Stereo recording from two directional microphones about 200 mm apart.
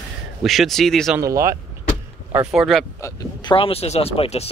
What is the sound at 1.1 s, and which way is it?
Speech, 15° right (ahead or behind).